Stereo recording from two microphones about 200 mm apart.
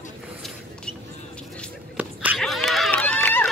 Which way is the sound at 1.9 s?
5° right (ahead or behind).